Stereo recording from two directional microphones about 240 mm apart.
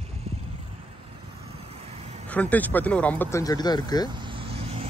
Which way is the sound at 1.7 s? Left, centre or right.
Right.